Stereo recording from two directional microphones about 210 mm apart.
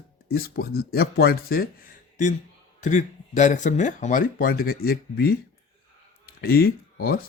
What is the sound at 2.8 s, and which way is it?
Speech, 35° left (ahead or behind).